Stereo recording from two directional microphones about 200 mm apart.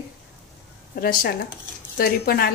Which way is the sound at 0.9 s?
50° left (ahead or behind).